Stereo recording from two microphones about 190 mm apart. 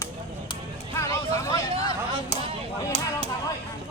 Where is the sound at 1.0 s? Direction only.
15° left (ahead or behind).